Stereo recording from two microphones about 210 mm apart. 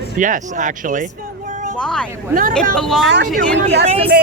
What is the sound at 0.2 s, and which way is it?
Speech, 40° right (ahead or behind).